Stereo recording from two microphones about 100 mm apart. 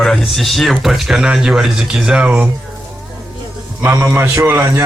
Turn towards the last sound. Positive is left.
turn(degrees=-25)  # may be behind; listen again after turning